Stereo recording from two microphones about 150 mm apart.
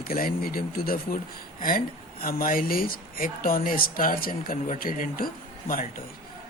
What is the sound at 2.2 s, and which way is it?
Speech, 70° left (ahead or behind).